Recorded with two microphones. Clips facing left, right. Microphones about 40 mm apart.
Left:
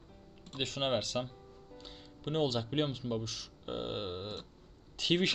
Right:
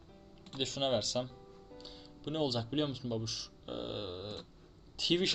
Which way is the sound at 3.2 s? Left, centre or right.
Left.